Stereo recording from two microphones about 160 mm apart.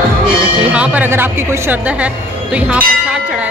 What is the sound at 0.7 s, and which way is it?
Speech, 10° right (ahead or behind).